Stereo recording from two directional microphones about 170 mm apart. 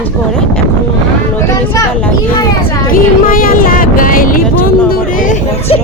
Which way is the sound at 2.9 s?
55° left (ahead or behind).